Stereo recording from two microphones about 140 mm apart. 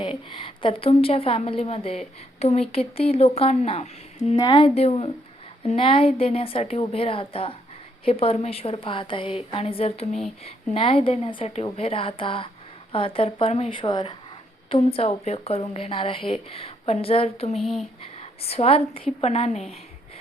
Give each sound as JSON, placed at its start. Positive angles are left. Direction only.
{"t": 0.0, "sound": "a woman's voice", "side_deg": 40}
{"t": 4.4, "sound": "a woman's voice", "side_deg": 30}
{"t": 4.7, "sound": "a woman's voice", "side_deg": 45}
{"t": 10.1, "sound": "speech", "side_deg": 0}
{"t": 10.4, "sound": "a woman's voice", "side_deg": 40}
{"t": 17.6, "sound": "speech", "side_deg": 0}
{"t": 18.0, "sound": "a woman's voice", "side_deg": 45}